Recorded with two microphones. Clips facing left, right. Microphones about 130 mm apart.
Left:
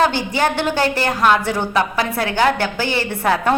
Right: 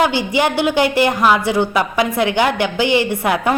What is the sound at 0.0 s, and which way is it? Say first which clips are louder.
A woman's voice: right 1 dB; 15° right (ahead or behind).